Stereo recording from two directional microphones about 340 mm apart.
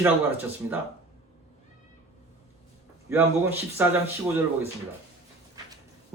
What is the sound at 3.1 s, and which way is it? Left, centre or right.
Speech, centre.